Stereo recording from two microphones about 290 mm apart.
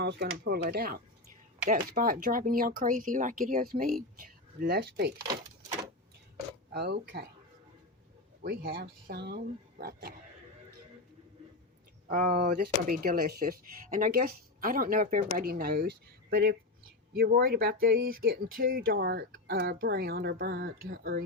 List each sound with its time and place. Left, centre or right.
0.0 s speech: right
5.1 s a sound: centre
6.7 s speech: right
8.4 s speech: right
12.0 s speech: right